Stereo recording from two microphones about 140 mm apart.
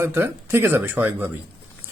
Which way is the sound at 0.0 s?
15° right (ahead or behind).